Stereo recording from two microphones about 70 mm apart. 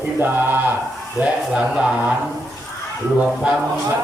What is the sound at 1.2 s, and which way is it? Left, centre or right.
Speech, centre.